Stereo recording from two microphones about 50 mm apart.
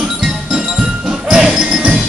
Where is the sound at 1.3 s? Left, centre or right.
Centre.